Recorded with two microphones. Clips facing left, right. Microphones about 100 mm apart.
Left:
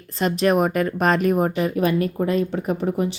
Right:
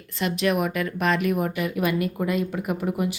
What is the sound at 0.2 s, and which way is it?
A woman's voice, 40° left (ahead or behind).